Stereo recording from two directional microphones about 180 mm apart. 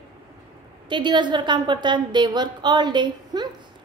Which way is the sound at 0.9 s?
25° right (ahead or behind).